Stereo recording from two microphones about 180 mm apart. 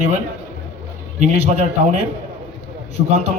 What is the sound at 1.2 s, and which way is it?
Speech, 35° right (ahead or behind).